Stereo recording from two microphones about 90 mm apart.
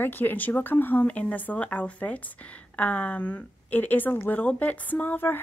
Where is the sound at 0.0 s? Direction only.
20° left (ahead or behind).